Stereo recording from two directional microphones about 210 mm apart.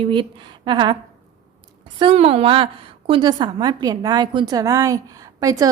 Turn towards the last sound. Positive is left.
turn(degrees=-15)  # may be behind; listen again after turning